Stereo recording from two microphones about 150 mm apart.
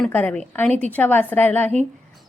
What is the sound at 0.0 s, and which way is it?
Speech, 10° left (ahead or behind).